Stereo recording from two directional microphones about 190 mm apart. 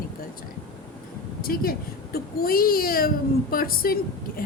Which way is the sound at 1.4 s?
50° left (ahead or behind).